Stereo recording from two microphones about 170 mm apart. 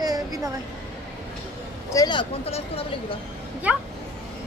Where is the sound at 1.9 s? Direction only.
25° left (ahead or behind).